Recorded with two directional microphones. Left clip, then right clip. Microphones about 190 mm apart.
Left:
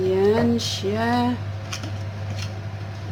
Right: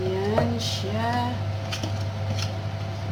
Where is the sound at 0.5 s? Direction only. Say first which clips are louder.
Left 4 dB; 70° left (ahead or behind).